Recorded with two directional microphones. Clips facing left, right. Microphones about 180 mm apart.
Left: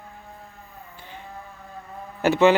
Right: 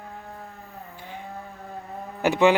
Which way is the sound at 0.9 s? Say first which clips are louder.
Right 3 dB; 10° right (ahead or behind).